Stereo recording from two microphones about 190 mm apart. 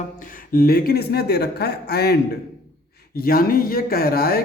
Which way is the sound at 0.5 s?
50° left (ahead or behind).